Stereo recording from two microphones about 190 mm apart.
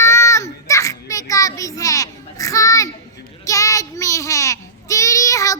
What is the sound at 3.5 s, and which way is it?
Child singing, 15° left (ahead or behind).